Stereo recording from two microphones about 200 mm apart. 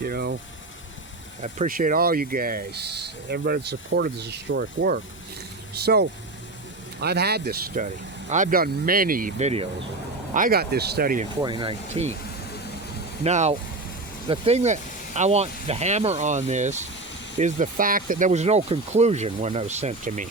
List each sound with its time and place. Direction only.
0.0 s speech: 50° right (ahead or behind)
1.4 s speech: 40° right (ahead or behind)
8.3 s speech: 40° right (ahead or behind)
10.3 s speech: 45° right (ahead or behind)
11.4 s speech: 25° right (ahead or behind)
13.2 s speech: 35° right (ahead or behind)